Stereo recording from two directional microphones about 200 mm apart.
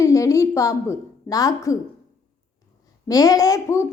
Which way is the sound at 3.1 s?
15° left (ahead or behind).